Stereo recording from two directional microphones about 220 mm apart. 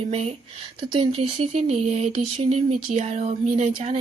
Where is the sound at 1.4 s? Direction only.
30° right (ahead or behind).